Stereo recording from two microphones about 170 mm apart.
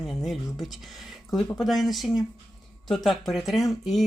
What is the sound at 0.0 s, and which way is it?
Speech, centre (ahead or behind).